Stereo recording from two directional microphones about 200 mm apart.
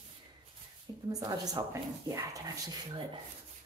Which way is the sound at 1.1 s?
20° right (ahead or behind).